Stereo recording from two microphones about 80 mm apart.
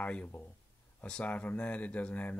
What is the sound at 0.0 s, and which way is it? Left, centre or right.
Speech, centre.